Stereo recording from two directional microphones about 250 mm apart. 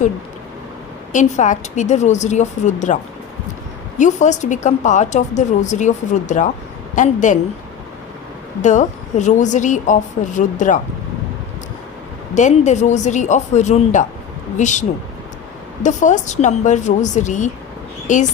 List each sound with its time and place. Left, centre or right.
1.1 s a woman's voice: left
8.6 s a woman's voice: left
12.3 s a woman's voice: left